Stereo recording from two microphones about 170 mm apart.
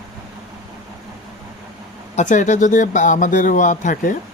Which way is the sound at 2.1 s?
45° left (ahead or behind).